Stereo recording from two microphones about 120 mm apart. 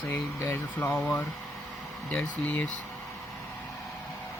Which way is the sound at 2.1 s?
10° left (ahead or behind).